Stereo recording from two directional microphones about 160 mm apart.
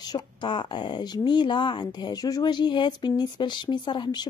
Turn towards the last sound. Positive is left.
turn(degrees=25)  # may be behind; listen again after turning